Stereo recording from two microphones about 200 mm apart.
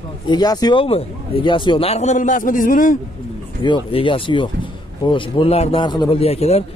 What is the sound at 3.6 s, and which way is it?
Speech, 25° left (ahead or behind).